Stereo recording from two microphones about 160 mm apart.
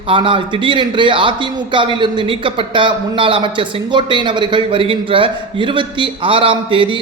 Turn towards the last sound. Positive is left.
turn(degrees=-30)  # may be behind; listen again after turning